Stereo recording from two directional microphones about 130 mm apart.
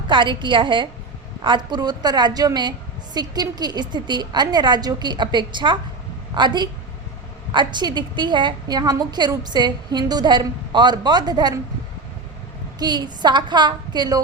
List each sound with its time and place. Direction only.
0.1 s a woman's voice: 35° right (ahead or behind)
12.8 s a woman's voice: 35° right (ahead or behind)